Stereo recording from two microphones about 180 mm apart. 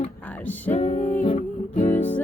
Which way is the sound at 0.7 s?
40° left (ahead or behind).